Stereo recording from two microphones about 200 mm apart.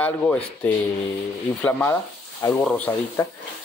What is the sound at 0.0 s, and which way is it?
Speech, 10° left (ahead or behind).